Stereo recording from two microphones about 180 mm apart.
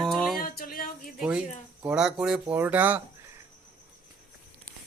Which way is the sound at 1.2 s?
5° right (ahead or behind).